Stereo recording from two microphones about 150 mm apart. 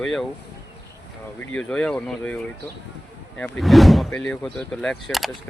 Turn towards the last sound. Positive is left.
turn(degrees=0)  # may be behind; listen again after turning